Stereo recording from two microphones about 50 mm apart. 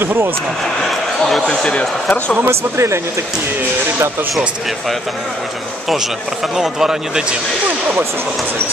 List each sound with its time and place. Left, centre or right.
0.0 s speech: right
1.5 s speech: centre
2.4 s speech: right
6.5 s speech: centre